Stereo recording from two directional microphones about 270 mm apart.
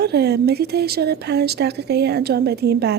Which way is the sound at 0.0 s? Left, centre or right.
Right.